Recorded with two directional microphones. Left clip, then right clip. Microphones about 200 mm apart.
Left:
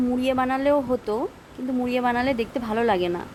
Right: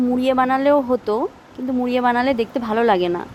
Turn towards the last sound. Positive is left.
turn(degrees=-15)  # may be behind; listen again after turning